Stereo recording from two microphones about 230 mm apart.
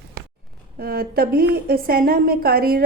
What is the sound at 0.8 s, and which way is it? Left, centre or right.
Speech, right.